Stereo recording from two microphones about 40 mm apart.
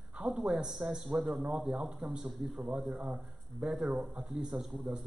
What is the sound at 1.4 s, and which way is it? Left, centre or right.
Speech, right.